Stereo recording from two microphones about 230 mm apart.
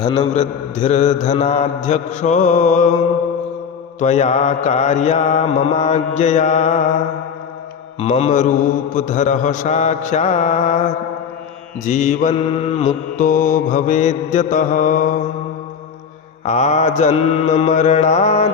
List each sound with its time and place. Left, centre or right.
0.0 s mantra: left
4.0 s mantra: left
7.9 s mantra: left
11.9 s mantra: left
16.5 s mantra: left